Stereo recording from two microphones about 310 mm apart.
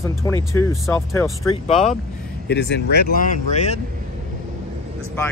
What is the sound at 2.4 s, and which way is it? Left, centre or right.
Speech, left.